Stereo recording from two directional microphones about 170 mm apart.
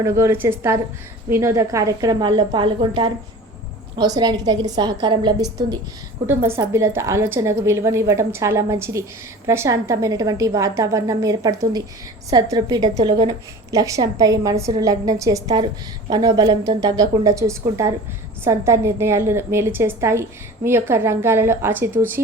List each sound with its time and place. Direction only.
0.0 s a woman's voice: 20° right (ahead or behind)